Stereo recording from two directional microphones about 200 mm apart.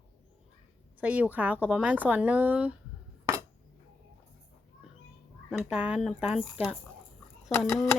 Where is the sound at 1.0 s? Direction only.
10° right (ahead or behind).